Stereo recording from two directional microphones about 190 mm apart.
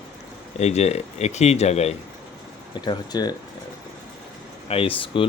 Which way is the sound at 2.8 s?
20° left (ahead or behind).